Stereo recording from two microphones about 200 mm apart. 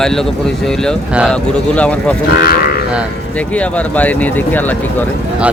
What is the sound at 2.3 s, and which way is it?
Speech, 50° left (ahead or behind).